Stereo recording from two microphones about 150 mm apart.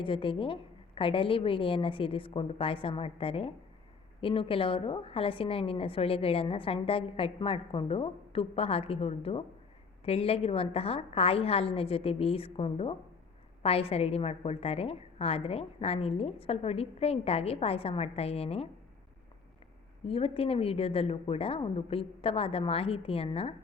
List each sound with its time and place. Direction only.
0.0 s a woman's voice: 35° left (ahead or behind)
20.1 s a woman's voice: 40° left (ahead or behind)